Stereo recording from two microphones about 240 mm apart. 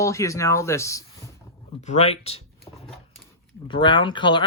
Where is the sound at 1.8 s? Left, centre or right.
Left.